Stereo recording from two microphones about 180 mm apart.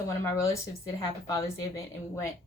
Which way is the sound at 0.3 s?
15° left (ahead or behind).